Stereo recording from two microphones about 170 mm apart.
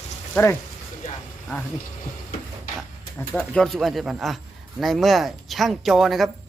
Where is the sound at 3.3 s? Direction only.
Centre (ahead or behind).